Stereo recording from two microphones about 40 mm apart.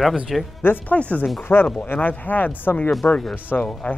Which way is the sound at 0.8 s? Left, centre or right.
Left.